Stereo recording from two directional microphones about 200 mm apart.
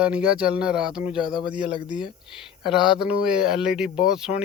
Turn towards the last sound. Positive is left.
turn(degrees=-5)  # may be behind; listen again after turning